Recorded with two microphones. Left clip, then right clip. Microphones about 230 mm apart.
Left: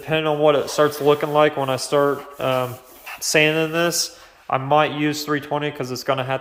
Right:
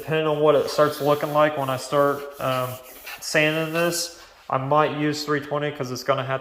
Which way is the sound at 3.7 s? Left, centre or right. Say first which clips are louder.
Left 3 dB; centre.